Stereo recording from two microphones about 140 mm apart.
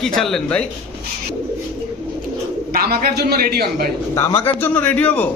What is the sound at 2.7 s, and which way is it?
A man's voice, 90° right.